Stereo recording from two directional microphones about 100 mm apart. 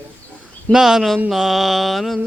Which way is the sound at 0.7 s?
5° right (ahead or behind).